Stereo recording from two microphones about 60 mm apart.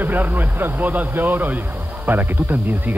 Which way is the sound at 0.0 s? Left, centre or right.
Right.